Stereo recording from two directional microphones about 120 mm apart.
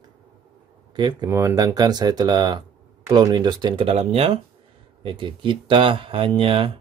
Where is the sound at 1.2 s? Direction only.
25° right (ahead or behind); by 3.9 s 40° right (ahead or behind).